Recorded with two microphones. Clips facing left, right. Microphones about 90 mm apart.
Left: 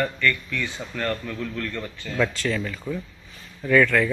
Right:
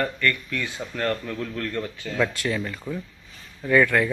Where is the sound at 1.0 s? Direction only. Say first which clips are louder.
Right 1 dB; centre (ahead or behind).